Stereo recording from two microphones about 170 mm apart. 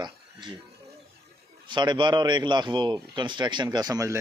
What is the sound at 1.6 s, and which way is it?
Speech, 25° right (ahead or behind).